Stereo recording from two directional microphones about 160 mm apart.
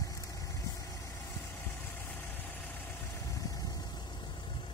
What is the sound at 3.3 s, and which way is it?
Vehicle, 20° left (ahead or behind).